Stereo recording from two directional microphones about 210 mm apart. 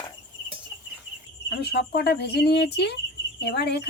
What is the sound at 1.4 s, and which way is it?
Speech, 50° left (ahead or behind).